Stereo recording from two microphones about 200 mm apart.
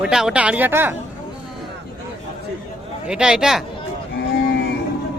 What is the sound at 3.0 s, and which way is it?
Speech, 5° right (ahead or behind).